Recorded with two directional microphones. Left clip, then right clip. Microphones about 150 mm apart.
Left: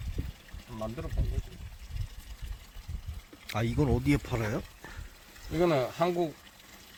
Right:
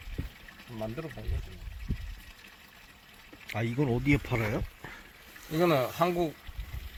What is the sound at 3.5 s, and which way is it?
Speech, 20° left (ahead or behind).